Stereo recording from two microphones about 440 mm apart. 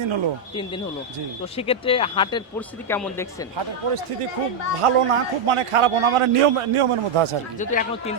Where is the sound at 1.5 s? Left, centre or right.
Centre.